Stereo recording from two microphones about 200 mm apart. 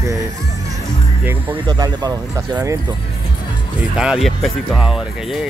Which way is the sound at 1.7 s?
20° right (ahead or behind).